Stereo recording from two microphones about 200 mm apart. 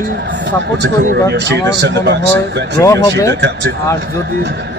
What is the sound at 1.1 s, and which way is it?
A man's voice, 60° right (ahead or behind).